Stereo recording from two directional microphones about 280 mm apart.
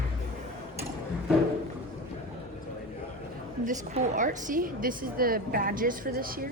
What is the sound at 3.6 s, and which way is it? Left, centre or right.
A woman's voice, right.